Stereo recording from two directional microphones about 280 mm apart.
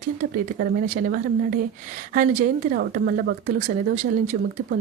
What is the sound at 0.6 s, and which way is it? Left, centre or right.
Speech, right.